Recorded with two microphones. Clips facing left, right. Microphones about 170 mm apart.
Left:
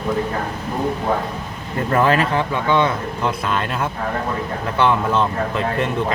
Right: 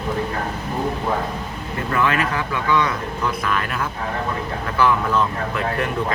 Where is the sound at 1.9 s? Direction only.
35° left (ahead or behind).